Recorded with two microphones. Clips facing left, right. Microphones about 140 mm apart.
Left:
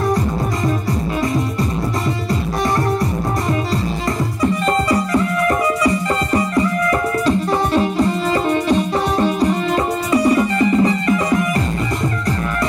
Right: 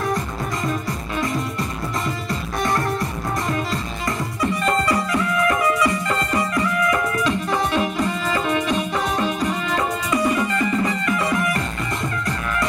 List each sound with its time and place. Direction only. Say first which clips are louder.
4.4 s music: left 3 dB; 30° left (ahead or behind)
10.1 s music: left 6 dB; 30° left (ahead or behind)